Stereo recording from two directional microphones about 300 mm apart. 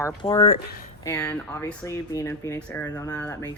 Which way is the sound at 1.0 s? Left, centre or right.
Centre.